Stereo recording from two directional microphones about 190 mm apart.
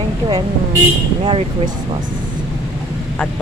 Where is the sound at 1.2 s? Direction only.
25° right (ahead or behind).